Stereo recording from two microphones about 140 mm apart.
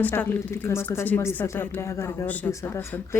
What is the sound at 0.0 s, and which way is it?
Speech, 10° left (ahead or behind).